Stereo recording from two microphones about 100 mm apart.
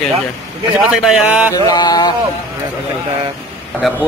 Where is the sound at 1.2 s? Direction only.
15° right (ahead or behind).